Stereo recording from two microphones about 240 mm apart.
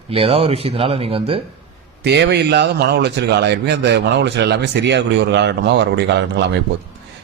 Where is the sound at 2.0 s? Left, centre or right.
Right.